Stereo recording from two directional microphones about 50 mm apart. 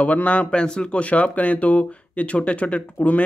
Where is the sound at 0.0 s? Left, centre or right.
Left.